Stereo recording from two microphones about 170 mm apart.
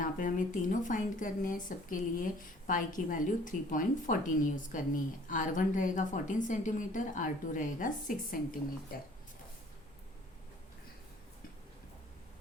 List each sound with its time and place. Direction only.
0.0 s speech: 50° left (ahead or behind)